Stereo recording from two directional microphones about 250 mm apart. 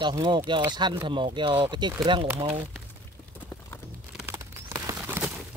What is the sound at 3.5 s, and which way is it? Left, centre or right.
Clip-clop, centre.